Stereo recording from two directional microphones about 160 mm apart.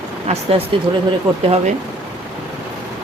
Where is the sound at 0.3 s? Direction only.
45° right (ahead or behind).